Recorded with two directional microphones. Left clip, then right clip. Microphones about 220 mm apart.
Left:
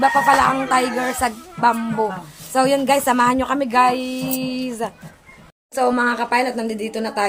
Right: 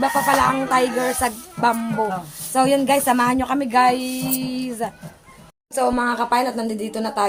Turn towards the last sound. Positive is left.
turn(degrees=0)  # may be behind; listen again after turning